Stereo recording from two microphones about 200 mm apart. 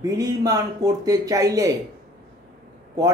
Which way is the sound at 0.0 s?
15° right (ahead or behind).